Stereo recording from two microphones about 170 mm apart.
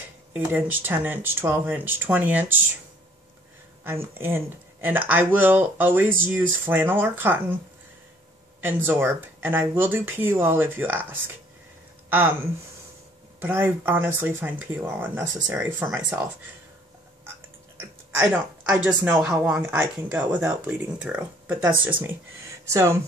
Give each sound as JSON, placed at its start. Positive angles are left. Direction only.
{"t": 0.3, "sound": "speech", "side_deg": -10}
{"t": 3.8, "sound": "speech", "side_deg": -15}
{"t": 8.5, "sound": "speech", "side_deg": -10}
{"t": 13.4, "sound": "speech", "side_deg": -10}
{"t": 17.7, "sound": "speech", "side_deg": -10}
{"t": 22.7, "sound": "speech", "side_deg": -15}